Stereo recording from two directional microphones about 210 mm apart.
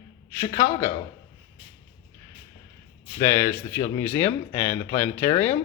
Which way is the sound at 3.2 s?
15° left (ahead or behind).